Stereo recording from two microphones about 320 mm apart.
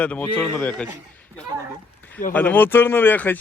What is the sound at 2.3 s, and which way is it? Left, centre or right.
Speech, centre.